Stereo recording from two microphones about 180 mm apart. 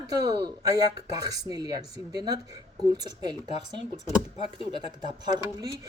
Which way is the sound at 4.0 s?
35° left (ahead or behind).